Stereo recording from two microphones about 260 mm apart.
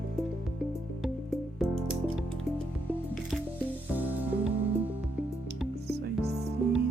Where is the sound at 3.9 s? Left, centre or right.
Centre.